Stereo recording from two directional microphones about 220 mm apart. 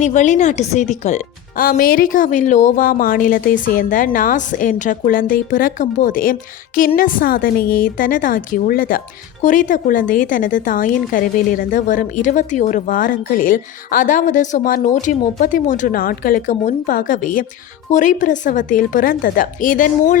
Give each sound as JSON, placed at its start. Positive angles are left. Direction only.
{"t": 0.0, "sound": "a woman's voice", "side_deg": 35}